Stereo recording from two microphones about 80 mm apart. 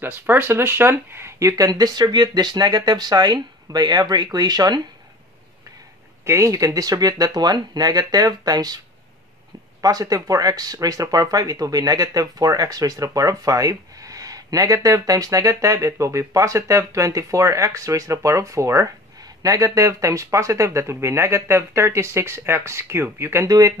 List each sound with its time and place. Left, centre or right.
0.0 s speech: right
1.6 s speech: right
6.2 s speech: right